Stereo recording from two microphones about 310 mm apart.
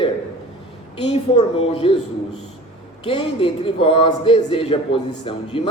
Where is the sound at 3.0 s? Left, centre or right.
Centre.